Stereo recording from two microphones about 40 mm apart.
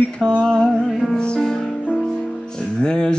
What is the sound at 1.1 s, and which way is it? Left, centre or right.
Music, left.